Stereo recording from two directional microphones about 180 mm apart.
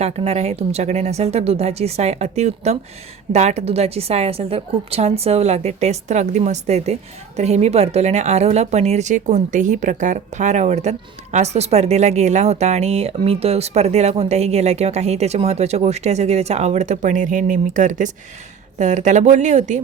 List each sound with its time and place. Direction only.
0.0 s a woman's voice: 35° right (ahead or behind)